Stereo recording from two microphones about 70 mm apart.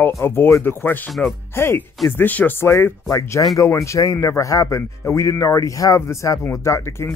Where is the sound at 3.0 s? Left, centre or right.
Left.